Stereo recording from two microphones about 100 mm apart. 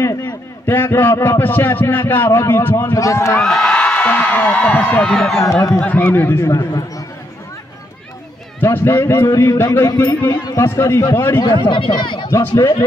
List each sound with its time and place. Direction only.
0.0 s a sound: 35° left (ahead or behind)
0.7 s a man's voice: 20° left (ahead or behind)
3.4 s a man's voice: 5° left (ahead or behind)
5.0 s speech: 5° left (ahead or behind)
5.8 s a man's voice: 15° left (ahead or behind)
6.5 s speech: 35° left (ahead or behind)
8.5 s a man's voice: 20° left (ahead or behind)
10.3 s speech: 40° left (ahead or behind)
10.6 s a man's voice: 25° left (ahead or behind)
11.6 s speech: 50° left (ahead or behind)
12.3 s speech: 30° left (ahead or behind)